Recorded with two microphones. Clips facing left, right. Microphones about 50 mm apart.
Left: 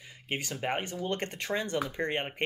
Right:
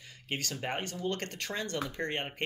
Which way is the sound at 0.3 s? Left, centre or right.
Centre.